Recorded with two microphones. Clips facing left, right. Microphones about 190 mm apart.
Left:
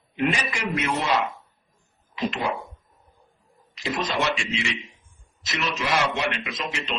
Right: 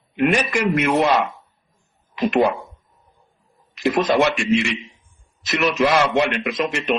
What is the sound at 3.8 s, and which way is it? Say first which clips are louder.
Speech: right 9 dB; 55° right (ahead or behind).